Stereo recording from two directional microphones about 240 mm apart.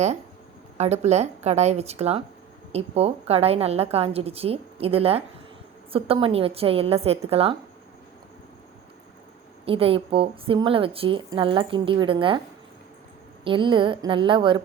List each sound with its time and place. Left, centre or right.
0.8 s a woman's voice: right
9.6 s a woman's voice: right
13.4 s a woman's voice: right